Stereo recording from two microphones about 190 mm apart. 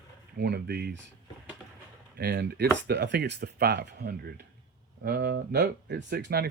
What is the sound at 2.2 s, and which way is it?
Speech, 60° right (ahead or behind).